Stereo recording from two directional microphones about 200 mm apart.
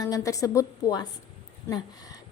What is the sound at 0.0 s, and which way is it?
A woman's voice, 15° left (ahead or behind).